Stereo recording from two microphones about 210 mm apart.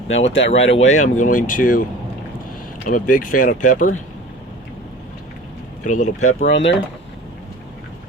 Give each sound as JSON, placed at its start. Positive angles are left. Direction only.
{"t": 0.3, "sound": "speech", "side_deg": 60}
{"t": 0.8, "sound": "speech", "side_deg": 35}
{"t": 2.8, "sound": "speech", "side_deg": 40}
{"t": 5.8, "sound": "speech", "side_deg": 35}
{"t": 6.2, "sound": "speech", "side_deg": 65}